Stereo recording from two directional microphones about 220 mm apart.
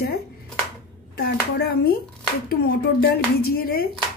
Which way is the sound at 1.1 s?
45° left (ahead or behind).